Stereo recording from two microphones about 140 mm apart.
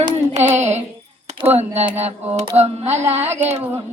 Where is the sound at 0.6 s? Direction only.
55° right (ahead or behind).